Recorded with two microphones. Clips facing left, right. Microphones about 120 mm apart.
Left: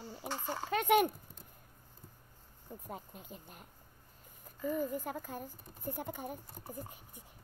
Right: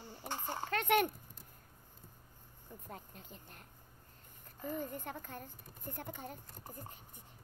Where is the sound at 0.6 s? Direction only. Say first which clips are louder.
Left 3 dB; 10° left (ahead or behind).